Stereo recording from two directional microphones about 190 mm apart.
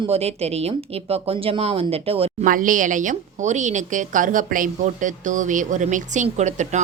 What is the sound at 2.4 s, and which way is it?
A woman's voice, 45° right (ahead or behind).